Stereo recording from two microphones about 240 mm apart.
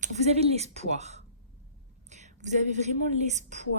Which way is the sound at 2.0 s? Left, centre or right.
Right.